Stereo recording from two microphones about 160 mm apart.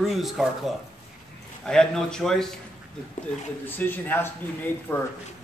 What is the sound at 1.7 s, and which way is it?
Speech, 5° left (ahead or behind).